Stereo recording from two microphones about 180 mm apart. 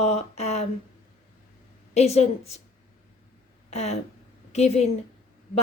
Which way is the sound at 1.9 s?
35° left (ahead or behind).